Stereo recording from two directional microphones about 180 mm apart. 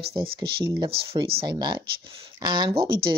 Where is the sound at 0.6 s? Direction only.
20° right (ahead or behind).